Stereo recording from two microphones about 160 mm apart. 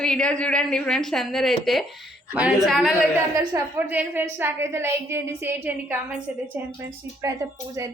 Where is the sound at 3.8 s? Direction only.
10° right (ahead or behind).